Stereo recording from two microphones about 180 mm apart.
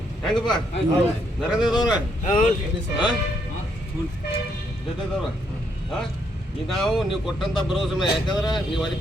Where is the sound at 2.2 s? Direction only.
45° left (ahead or behind).